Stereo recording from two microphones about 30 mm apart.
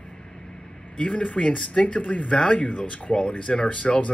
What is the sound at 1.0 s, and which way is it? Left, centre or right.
Speech, left.